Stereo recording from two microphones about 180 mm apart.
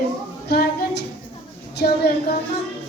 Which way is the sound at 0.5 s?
65° left (ahead or behind).